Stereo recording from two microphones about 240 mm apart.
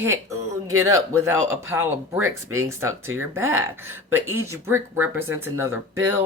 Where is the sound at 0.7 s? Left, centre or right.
Right.